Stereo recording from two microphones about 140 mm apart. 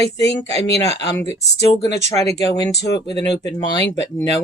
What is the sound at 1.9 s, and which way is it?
Speech, 25° left (ahead or behind).